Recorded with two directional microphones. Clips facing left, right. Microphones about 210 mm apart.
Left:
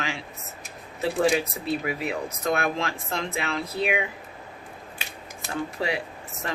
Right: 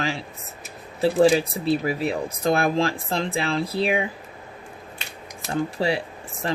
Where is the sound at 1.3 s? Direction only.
30° right (ahead or behind).